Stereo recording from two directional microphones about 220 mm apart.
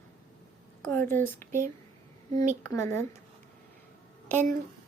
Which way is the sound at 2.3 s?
35° right (ahead or behind).